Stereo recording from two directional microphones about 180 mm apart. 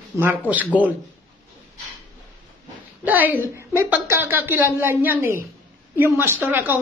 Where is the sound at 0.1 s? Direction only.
15° right (ahead or behind).